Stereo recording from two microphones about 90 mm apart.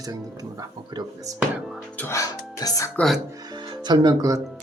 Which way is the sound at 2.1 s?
40° left (ahead or behind).